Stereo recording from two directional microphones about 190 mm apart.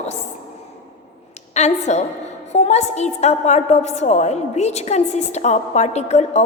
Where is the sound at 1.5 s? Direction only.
35° left (ahead or behind).